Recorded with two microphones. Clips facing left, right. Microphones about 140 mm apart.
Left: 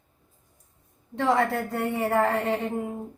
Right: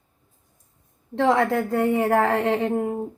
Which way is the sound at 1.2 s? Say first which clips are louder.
Right 4 dB; 90° right.